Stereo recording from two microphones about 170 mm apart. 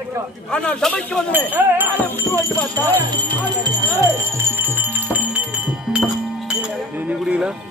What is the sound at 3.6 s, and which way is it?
Music, 20° right (ahead or behind).